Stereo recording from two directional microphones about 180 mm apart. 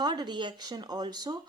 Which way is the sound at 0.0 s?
25° right (ahead or behind).